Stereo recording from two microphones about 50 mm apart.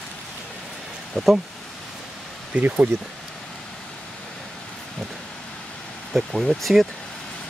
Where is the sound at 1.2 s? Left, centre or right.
Centre.